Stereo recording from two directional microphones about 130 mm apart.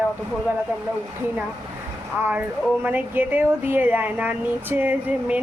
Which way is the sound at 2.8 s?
15° right (ahead or behind).